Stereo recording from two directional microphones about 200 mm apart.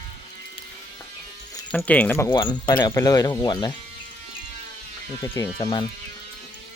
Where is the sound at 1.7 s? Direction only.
5° left (ahead or behind).